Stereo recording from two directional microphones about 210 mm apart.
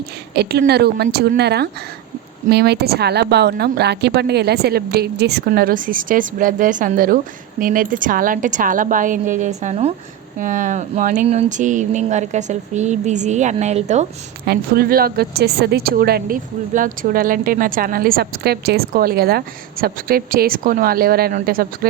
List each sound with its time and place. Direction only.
0.3 s a woman's voice: 45° right (ahead or behind)
14.4 s a woman's voice: 45° right (ahead or behind)